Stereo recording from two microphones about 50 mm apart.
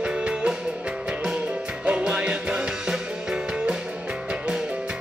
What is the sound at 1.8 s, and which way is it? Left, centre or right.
Music, centre.